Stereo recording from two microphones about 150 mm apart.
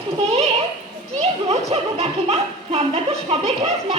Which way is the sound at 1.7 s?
45° right (ahead or behind).